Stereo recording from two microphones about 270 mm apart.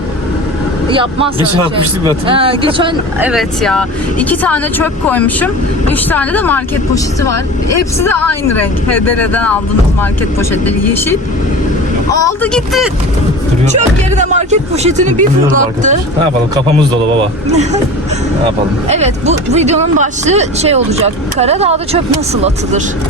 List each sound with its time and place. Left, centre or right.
0.9 s speech: centre
3.2 s speech: centre
9.0 s speech: left
9.2 s speech: centre
12.2 s speech: centre
13.7 s speech: right
17.5 s speech: right
18.9 s speech: right